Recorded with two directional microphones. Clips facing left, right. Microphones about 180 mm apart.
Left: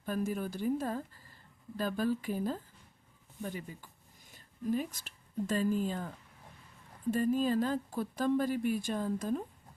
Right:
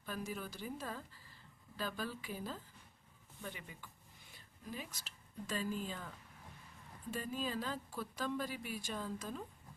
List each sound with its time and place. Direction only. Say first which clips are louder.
0.0 s speech: left 9 dB; 50° left (ahead or behind)
7.1 s speech: left 12 dB; 50° left (ahead or behind)